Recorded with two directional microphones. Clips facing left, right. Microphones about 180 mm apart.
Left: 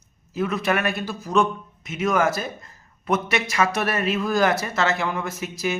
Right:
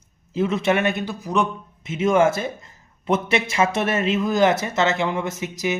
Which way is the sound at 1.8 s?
25° right (ahead or behind).